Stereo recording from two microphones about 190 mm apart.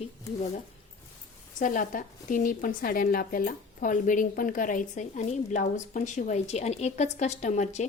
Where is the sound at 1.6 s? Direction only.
45° left (ahead or behind).